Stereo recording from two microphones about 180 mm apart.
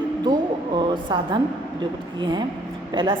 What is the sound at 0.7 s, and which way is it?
A woman's voice, 25° right (ahead or behind).